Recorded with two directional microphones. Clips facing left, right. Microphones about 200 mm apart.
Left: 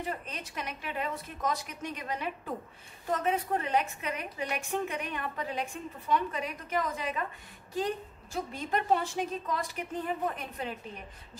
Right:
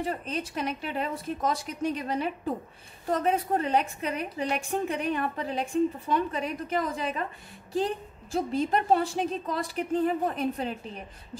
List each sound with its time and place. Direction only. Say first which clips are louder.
0.0 s a woman's voice: right 6 dB; 30° right (ahead or behind)